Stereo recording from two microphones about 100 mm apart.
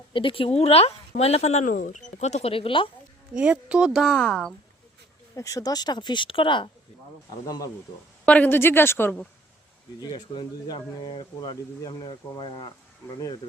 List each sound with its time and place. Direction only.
0.1 s speech: 55° left (ahead or behind); by 1.6 s 90° left
2.3 s speech: 75° left (ahead or behind)
3.3 s speech: 10° right (ahead or behind); by 4.5 s 5° left (ahead or behind)
5.3 s speech: 35° left (ahead or behind); by 6.7 s 55° left (ahead or behind)
7.4 s speech: 35° left (ahead or behind)
8.2 s a woman's voice: 15° left (ahead or behind)
10.0 s speech: 45° left (ahead or behind)